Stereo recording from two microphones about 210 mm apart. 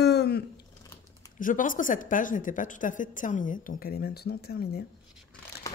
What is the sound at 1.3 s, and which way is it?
Speech, 40° left (ahead or behind).